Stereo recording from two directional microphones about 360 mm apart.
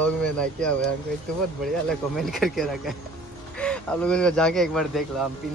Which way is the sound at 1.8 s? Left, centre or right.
Centre.